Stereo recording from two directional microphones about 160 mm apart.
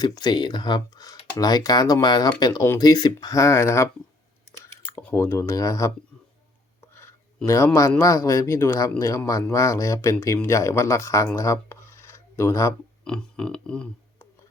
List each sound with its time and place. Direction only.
0.0 s speech: 25° left (ahead or behind)
7.4 s speech: 15° left (ahead or behind)
13.1 s a sound: 5° left (ahead or behind)